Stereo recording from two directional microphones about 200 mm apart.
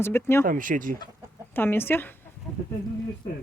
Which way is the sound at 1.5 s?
10° left (ahead or behind).